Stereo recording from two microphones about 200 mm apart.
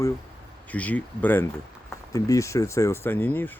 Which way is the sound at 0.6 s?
10° left (ahead or behind).